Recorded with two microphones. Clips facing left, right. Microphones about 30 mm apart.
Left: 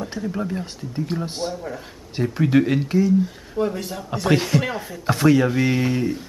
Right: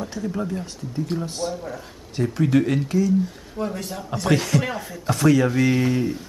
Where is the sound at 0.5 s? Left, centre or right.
Left.